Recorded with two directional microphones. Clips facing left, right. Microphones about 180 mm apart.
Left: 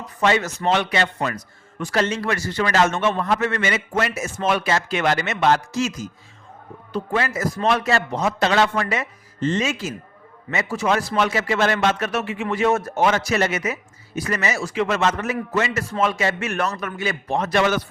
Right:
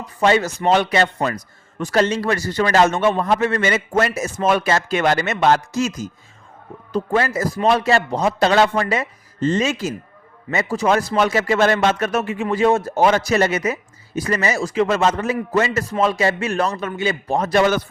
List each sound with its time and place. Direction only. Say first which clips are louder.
0.2 s a man's voice: right 3 dB; 35° right (ahead or behind)
12.5 s a man's voice: right 3 dB; 30° right (ahead or behind)